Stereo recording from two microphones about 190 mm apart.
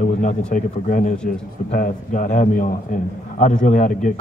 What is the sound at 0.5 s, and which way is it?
A man's voice, 45° left (ahead or behind).